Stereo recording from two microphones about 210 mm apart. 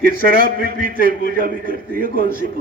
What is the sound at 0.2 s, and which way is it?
A man's voice, 45° right (ahead or behind).